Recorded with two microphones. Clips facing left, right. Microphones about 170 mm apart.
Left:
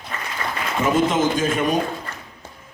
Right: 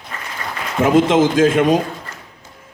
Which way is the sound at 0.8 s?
90° right.